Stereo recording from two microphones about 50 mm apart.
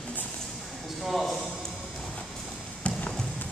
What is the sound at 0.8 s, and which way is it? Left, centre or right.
Speech, centre.